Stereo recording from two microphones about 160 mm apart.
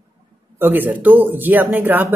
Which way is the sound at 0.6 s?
10° right (ahead or behind).